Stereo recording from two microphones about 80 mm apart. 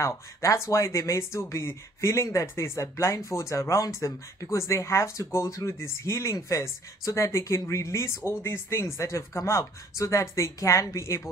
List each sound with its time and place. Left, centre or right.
0.0 s speech: left